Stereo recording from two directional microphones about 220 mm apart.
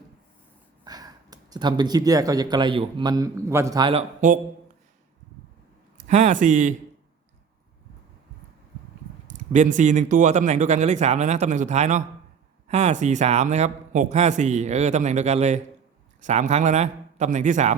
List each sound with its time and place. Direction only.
0.9 s speech: 15° right (ahead or behind)
4.2 s a man's voice: 35° right (ahead or behind)
6.1 s a man's voice: 35° right (ahead or behind)
9.2 s a man's voice: 35° right (ahead or behind)